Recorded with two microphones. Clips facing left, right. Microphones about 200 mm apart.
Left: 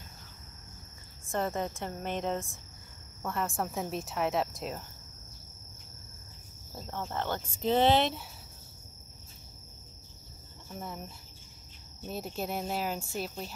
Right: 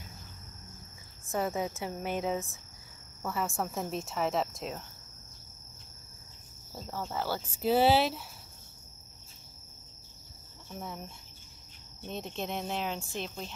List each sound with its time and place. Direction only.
1.3 s speech: 5° right (ahead or behind)
6.8 s speech: 5° right (ahead or behind)
10.7 s speech: centre (ahead or behind)